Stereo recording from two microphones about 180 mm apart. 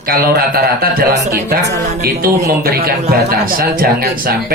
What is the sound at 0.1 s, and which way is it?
A man's voice, 55° right (ahead or behind).